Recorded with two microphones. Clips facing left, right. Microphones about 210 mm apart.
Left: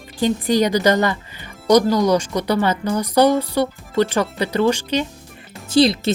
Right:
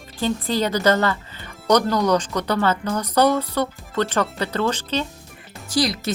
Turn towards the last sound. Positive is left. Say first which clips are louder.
# left 7 dB
turn(degrees=25)  # may be behind; listen again after turning